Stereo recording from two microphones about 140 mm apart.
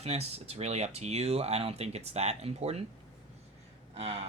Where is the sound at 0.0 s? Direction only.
50° right (ahead or behind).